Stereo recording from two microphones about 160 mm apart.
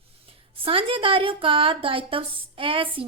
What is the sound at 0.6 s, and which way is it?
A woman's voice, 35° right (ahead or behind).